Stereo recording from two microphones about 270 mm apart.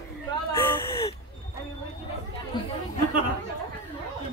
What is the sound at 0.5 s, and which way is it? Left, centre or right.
Whimper, centre.